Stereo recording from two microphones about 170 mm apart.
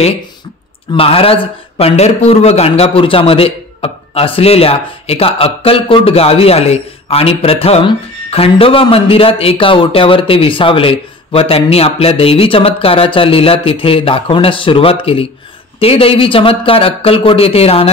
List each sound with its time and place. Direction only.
0.9 s a man's voice: 35° left (ahead or behind)